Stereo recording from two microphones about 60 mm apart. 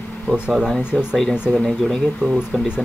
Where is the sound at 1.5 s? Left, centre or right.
Centre.